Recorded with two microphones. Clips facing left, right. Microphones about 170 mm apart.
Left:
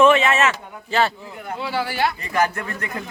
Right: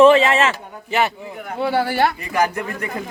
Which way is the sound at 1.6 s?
55° right (ahead or behind).